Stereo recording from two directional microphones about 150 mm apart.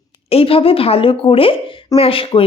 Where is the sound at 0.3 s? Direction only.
40° left (ahead or behind).